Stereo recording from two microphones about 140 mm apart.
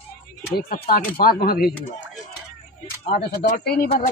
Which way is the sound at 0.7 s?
90° left.